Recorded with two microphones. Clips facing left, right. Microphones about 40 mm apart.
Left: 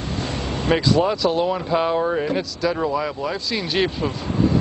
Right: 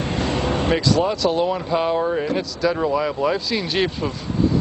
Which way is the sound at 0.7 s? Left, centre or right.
Centre.